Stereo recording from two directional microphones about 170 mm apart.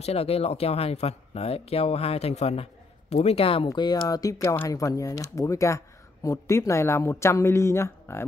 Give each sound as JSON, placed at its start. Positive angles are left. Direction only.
{"t": 0.0, "sound": "speech", "side_deg": 35}